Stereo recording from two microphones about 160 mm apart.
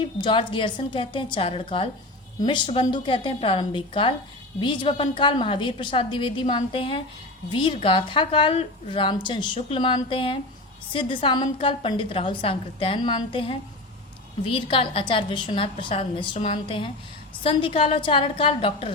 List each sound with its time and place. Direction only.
0.0 s a woman's voice: 30° left (ahead or behind)